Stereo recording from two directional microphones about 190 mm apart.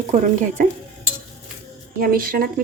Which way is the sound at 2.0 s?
50° right (ahead or behind).